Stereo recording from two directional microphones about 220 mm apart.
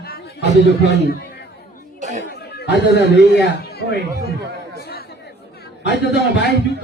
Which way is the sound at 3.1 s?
50° left (ahead or behind).